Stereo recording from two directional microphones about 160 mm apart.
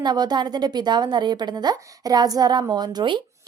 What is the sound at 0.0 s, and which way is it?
A woman's voice, 25° right (ahead or behind).